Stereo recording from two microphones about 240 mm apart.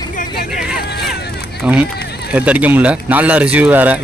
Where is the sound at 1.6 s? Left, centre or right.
Centre.